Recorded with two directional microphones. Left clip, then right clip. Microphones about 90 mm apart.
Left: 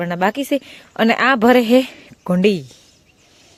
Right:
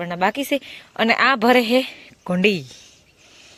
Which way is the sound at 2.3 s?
35° left (ahead or behind).